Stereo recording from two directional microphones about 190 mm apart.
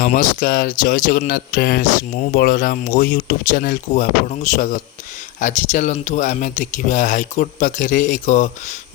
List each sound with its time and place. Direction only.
0.0 s speech: 45° left (ahead or behind)